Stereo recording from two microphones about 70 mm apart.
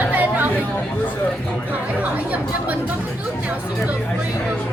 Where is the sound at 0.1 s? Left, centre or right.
Right.